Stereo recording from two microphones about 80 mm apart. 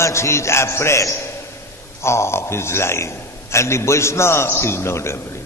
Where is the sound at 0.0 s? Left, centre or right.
Left.